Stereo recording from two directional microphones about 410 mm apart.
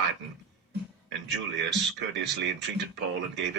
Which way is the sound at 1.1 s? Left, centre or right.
Right.